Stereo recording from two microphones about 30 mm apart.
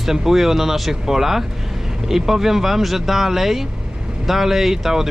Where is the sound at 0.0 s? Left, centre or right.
Centre.